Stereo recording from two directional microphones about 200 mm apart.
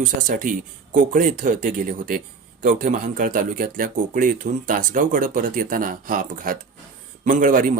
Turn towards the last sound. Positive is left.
turn(degrees=-40)  # may be behind; listen again after turning